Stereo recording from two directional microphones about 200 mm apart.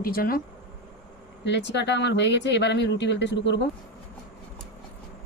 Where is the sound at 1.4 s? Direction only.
60° left (ahead or behind).